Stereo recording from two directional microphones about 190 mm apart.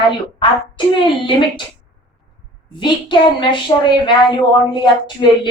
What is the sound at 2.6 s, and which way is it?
A woman's voice, 25° left (ahead or behind).